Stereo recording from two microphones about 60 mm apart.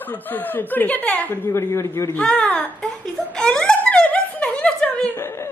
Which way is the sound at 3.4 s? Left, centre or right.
Centre.